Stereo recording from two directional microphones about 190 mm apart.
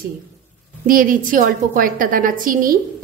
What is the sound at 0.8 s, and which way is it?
A woman's voice, 45° right (ahead or behind).